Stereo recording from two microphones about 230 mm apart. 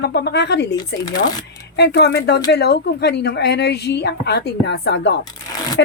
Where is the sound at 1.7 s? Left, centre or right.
Left.